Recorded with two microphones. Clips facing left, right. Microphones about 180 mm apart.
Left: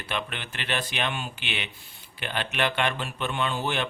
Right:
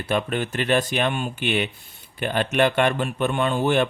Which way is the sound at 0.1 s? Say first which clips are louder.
Right 10 dB; 45° right (ahead or behind).